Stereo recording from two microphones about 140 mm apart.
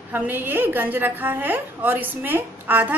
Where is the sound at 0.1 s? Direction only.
15° right (ahead or behind).